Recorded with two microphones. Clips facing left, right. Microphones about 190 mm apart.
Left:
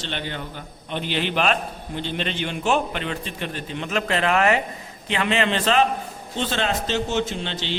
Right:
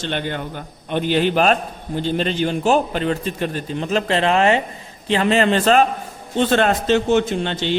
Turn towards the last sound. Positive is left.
turn(degrees=-50)  # may be behind; listen again after turning